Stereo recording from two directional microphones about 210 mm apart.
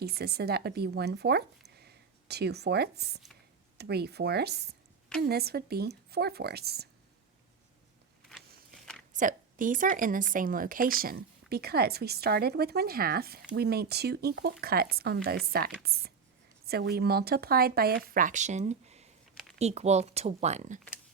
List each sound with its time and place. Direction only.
0.0 s a woman's voice: 50° right (ahead or behind)
9.1 s a woman's voice: 40° right (ahead or behind)